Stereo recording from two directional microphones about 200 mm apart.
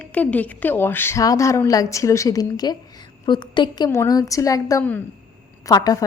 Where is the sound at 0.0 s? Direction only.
5° left (ahead or behind).